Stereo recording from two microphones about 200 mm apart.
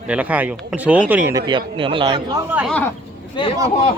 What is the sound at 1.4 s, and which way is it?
Speech, 25° right (ahead or behind).